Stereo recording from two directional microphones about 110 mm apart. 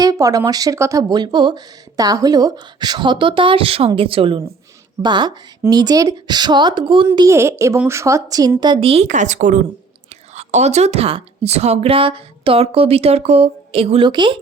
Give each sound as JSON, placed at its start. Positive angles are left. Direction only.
{"t": 0.0, "sound": "speech", "side_deg": -30}
{"t": 5.0, "sound": "speech", "side_deg": -45}
{"t": 7.3, "sound": "a woman's voice", "side_deg": -25}
{"t": 14.0, "sound": "speech", "side_deg": -45}